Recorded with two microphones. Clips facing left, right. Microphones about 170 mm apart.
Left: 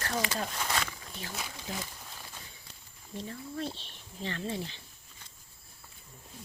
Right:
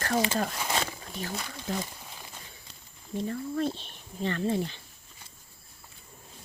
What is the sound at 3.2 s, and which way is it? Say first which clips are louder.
Speech: right 8 dB; 50° right (ahead or behind).